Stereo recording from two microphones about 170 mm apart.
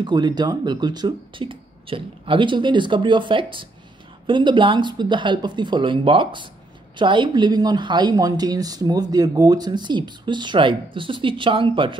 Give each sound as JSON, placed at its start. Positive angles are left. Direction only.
{"t": 0.0, "sound": "speech", "side_deg": -25}